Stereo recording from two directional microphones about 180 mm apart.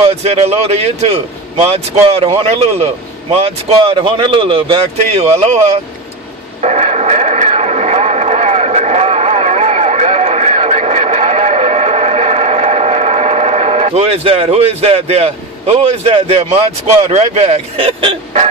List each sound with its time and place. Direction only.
0.0 s speech: 35° right (ahead or behind)
6.6 s radio: 40° right (ahead or behind)
17.1 s speech: 40° right (ahead or behind)